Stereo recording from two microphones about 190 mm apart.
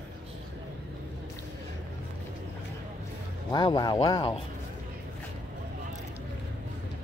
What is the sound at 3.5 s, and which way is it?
Speech, 20° left (ahead or behind).